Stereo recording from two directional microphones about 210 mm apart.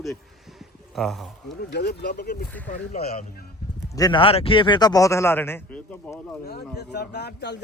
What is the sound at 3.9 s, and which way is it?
Speech, 20° left (ahead or behind).